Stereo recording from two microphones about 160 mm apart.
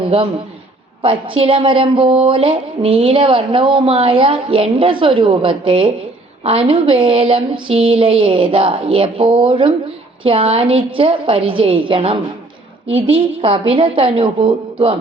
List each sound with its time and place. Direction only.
0.0 s a man's voice: 40° right (ahead or behind)
1.0 s music: 35° right (ahead or behind)